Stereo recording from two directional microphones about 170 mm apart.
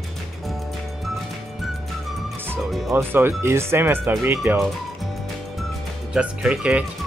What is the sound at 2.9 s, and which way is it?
Speech, 15° right (ahead or behind).